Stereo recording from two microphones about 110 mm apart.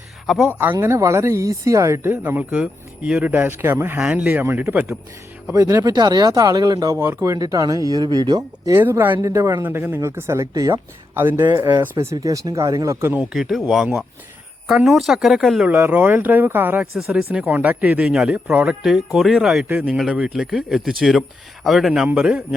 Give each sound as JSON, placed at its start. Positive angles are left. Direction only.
{"t": 0.3, "sound": "speech", "side_deg": -5}
{"t": 0.8, "sound": "speech", "side_deg": -25}
{"t": 2.0, "sound": "speech", "side_deg": -15}
{"t": 5.5, "sound": "speech", "side_deg": -30}
{"t": 7.3, "sound": "speech", "side_deg": -35}
{"t": 8.8, "sound": "speech", "side_deg": -20}
{"t": 13.1, "sound": "speech", "side_deg": -5}
{"t": 15.6, "sound": "speech", "side_deg": -10}
{"t": 17.0, "sound": "speech", "side_deg": -5}
{"t": 17.2, "sound": "speech", "side_deg": -15}
{"t": 19.6, "sound": "speech", "side_deg": -15}